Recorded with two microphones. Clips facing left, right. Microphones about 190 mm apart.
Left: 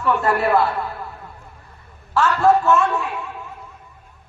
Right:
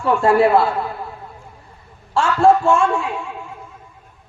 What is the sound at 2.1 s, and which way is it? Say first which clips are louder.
Speech: right 2 dB; 30° right (ahead or behind).